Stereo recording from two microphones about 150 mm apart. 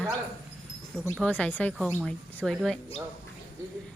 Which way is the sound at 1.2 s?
10° left (ahead or behind).